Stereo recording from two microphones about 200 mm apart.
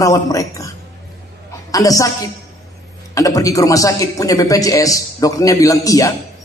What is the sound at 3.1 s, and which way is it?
A man's voice, 15° left (ahead or behind).